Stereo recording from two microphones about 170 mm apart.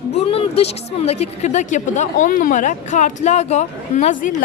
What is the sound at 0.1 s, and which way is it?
A woman's voice, 35° left (ahead or behind).